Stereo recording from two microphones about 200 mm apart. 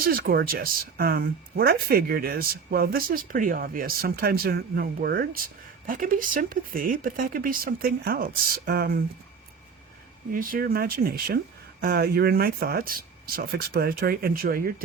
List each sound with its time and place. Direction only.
0.0 s speech: 45° right (ahead or behind)
10.3 s speech: 45° right (ahead or behind)